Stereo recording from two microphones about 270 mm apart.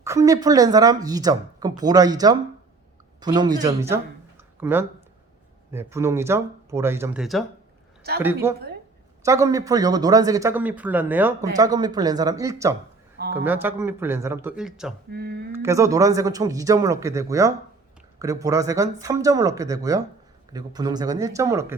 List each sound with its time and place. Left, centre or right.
0.0 s speech: centre
15.1 s speech: right
15.5 s speech: centre